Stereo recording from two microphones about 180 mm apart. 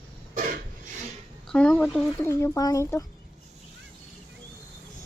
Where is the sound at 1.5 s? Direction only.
5° left (ahead or behind).